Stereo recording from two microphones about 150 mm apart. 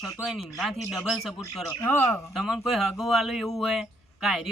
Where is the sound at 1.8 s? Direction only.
15° left (ahead or behind).